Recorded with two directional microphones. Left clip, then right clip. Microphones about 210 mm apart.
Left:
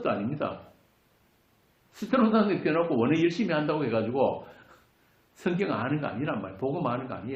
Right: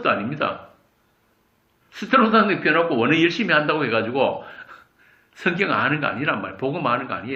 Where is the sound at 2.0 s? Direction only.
30° right (ahead or behind).